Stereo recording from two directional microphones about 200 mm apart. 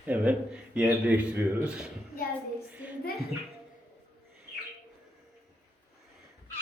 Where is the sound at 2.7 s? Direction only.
10° right (ahead or behind).